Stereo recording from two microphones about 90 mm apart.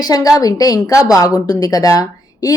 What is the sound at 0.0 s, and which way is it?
A woman's voice, 45° left (ahead or behind).